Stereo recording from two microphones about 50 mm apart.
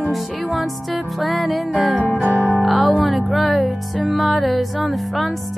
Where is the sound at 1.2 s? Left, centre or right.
Centre.